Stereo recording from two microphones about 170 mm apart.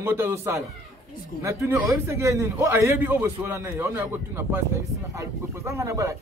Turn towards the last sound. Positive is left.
turn(degrees=-20)  # may be behind; listen again after turning